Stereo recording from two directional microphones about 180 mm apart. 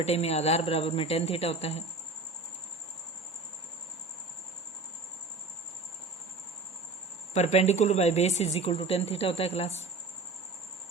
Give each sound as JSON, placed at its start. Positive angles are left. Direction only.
{"t": 0.0, "sound": "a woman's voice", "side_deg": 35}
{"t": 7.3, "sound": "a woman's voice", "side_deg": 40}